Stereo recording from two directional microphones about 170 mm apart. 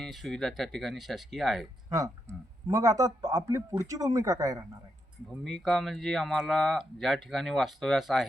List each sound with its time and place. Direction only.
0.0 s speech: centre (ahead or behind)
2.6 s speech: 20° right (ahead or behind)
5.4 s speech: centre (ahead or behind)